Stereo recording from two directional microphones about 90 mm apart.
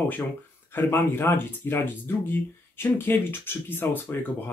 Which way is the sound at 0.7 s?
25° left (ahead or behind).